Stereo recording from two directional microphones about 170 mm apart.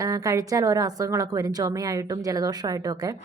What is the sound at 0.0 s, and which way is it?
A woman's voice, 20° right (ahead or behind).